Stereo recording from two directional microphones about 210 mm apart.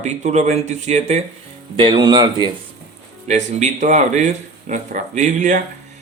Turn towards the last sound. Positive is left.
turn(degrees=-35)  # may be behind; listen again after turning